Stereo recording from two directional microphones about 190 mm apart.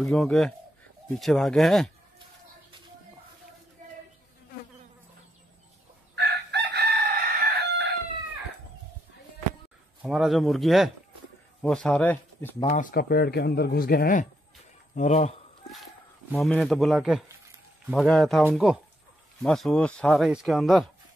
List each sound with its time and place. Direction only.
0.0 s speech: 5° left (ahead or behind)
6.1 s chicken: 65° right (ahead or behind)
10.0 s speech: centre (ahead or behind)
12.6 s speech: 40° left (ahead or behind)
12.9 s speech: 55° left (ahead or behind)
15.0 s speech: 35° left (ahead or behind)
15.7 s speech: centre (ahead or behind)